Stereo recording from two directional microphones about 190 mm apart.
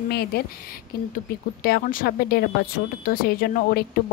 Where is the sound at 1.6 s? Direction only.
50° left (ahead or behind).